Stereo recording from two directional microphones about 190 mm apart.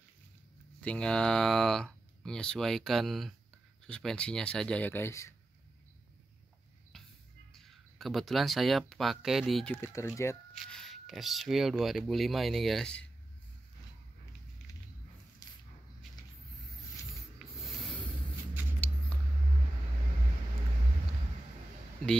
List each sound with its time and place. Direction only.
0.7 s speech: 5° left (ahead or behind)
7.5 s speech: centre (ahead or behind)
9.8 s speech: 15° left (ahead or behind)
10.5 s speech: centre (ahead or behind)
15.4 s a sound: 15° left (ahead or behind)
17.1 s mechanisms: centre (ahead or behind)
18.8 s rodents: 10° left (ahead or behind)